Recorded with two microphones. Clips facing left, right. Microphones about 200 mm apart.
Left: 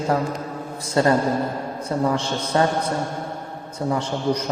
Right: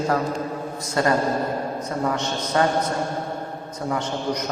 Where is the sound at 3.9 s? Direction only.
30° left (ahead or behind).